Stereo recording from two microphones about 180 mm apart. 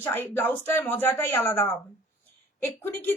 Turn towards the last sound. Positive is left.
turn(degrees=15)  # may be behind; listen again after turning